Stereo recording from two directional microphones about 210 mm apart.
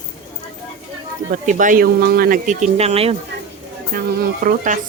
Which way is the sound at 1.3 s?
40° right (ahead or behind).